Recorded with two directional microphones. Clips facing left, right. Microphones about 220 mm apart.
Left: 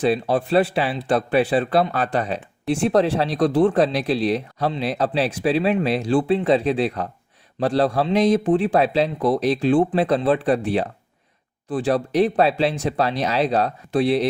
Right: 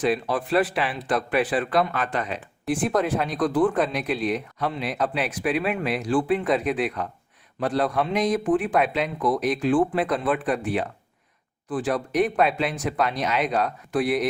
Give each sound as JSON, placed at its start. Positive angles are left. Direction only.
{"t": 0.0, "sound": "speech", "side_deg": 30}